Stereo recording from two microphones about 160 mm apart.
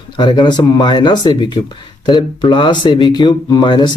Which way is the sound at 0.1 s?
25° left (ahead or behind).